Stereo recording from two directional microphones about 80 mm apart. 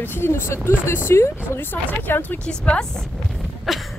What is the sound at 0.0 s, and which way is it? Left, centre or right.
Speech, left.